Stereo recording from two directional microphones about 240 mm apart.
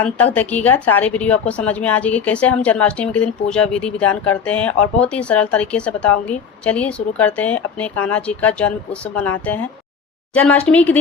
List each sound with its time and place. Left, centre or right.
0.0 s a woman's voice: centre
10.3 s a woman's voice: centre